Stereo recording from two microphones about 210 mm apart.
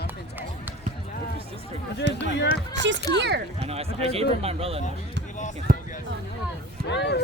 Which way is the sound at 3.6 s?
30° right (ahead or behind).